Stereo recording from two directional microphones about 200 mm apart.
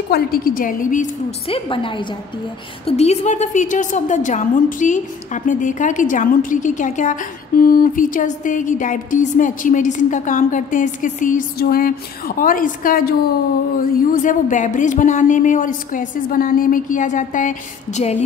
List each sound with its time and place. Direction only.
0.1 s a woman's voice: 45° left (ahead or behind)
1.5 s a woman's voice: 25° left (ahead or behind); by 13.1 s 45° left (ahead or behind)
14.1 s a woman's voice: 40° left (ahead or behind)